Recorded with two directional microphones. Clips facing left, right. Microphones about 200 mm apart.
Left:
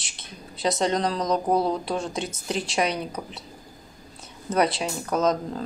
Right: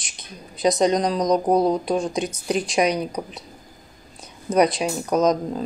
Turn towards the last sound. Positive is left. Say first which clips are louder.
# right 4 dB
turn(degrees=-15)  # may be behind; listen again after turning